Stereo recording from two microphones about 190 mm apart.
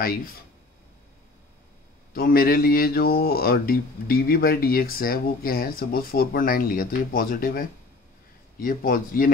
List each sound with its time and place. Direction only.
0.0 s speech: 50° left (ahead or behind)
2.1 s speech: 50° left (ahead or behind)